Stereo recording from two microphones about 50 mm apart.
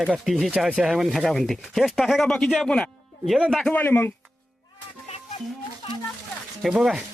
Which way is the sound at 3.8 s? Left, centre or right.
Left.